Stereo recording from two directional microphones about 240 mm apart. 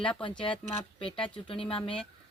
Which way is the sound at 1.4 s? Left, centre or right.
Left.